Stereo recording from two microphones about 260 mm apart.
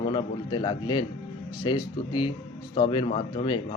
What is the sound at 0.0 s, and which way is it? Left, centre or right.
Speech, centre.